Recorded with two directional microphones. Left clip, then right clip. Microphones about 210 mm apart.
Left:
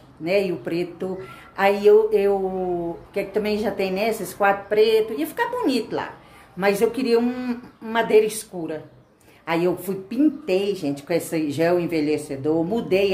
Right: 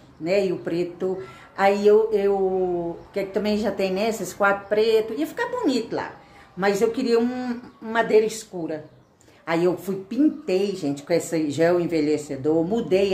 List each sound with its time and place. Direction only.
0.2 s speech: centre (ahead or behind)